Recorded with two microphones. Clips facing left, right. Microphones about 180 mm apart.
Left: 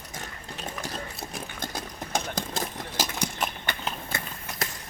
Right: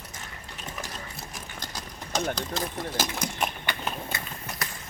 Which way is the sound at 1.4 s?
55° left (ahead or behind).